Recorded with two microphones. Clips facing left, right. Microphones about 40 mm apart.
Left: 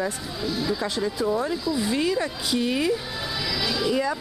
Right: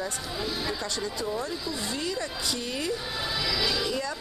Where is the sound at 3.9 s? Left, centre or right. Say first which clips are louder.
Left 7 dB; centre.